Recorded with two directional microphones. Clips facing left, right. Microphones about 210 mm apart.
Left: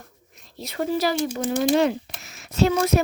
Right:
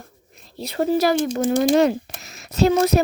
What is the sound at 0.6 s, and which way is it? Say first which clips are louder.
Speech: right 5 dB; 35° right (ahead or behind).